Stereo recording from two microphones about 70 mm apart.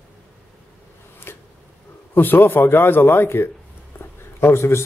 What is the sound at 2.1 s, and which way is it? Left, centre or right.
A man's voice, left.